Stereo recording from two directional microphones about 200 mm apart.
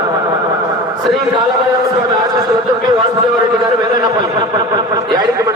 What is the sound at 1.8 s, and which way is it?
Speech, 20° right (ahead or behind).